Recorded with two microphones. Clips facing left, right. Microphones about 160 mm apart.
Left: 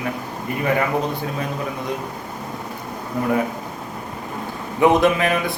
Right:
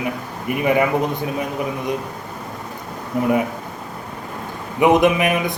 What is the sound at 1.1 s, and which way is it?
Speech, 20° right (ahead or behind).